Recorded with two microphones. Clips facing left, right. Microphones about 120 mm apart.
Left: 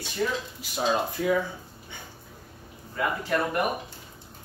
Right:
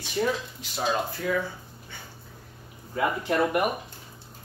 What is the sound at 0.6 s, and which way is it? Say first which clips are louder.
Speech: even; 5° left (ahead or behind).